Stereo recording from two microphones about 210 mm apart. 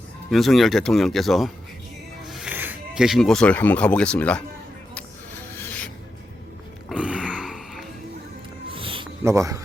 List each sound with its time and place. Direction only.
0.3 s speech: centre (ahead or behind)
5.5 s rub: 10° left (ahead or behind)
6.8 s a sound: 5° right (ahead or behind)
8.7 s music: 25° right (ahead or behind)
9.2 s speech: 15° right (ahead or behind)